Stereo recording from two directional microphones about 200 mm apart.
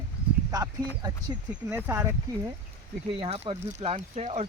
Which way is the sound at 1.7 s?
10° right (ahead or behind).